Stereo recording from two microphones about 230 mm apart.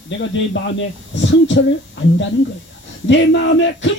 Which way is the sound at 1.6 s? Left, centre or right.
Left.